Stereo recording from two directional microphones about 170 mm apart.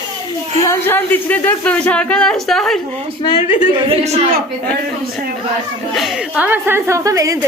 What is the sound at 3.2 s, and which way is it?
Speech, 30° left (ahead or behind).